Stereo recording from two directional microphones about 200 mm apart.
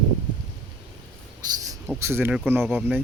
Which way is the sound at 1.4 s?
20° right (ahead or behind).